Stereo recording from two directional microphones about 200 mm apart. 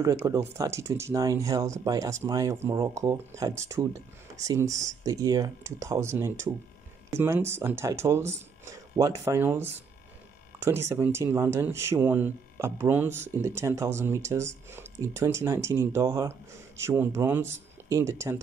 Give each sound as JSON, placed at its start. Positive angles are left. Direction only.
{"t": 0.0, "sound": "speech", "side_deg": -15}